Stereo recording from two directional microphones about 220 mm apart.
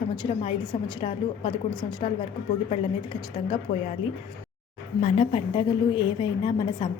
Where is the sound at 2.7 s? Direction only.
25° left (ahead or behind).